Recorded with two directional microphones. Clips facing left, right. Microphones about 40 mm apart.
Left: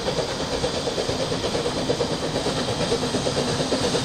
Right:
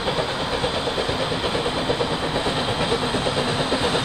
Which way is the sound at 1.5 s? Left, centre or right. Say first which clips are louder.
Right 1 dB; right.